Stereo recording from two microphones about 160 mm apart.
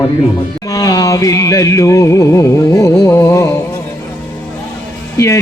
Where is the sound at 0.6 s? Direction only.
20° left (ahead or behind).